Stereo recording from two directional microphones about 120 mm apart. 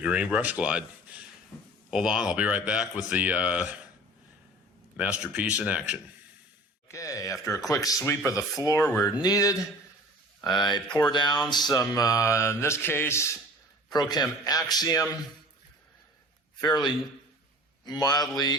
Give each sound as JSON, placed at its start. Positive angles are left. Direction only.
{"t": 0.0, "sound": "speech", "side_deg": -10}
{"t": 4.9, "sound": "speech", "side_deg": -10}
{"t": 6.8, "sound": "speech", "side_deg": 25}
{"t": 13.9, "sound": "speech", "side_deg": 35}
{"t": 16.6, "sound": "speech", "side_deg": 35}